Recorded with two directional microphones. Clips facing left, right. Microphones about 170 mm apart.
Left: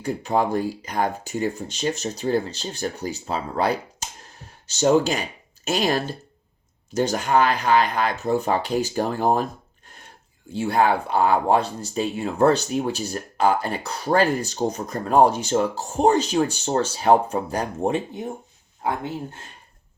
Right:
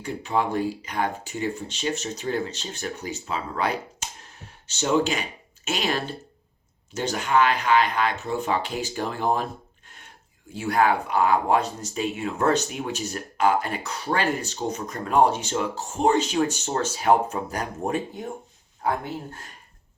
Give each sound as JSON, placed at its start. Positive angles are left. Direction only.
{"t": 0.0, "sound": "speech", "side_deg": 40}
{"t": 10.5, "sound": "speech", "side_deg": 30}